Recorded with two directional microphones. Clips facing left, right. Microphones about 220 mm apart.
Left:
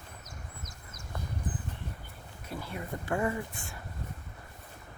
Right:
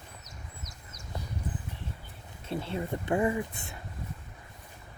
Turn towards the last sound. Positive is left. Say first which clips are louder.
# right 4 dB
turn(degrees=-20)  # may be behind; listen again after turning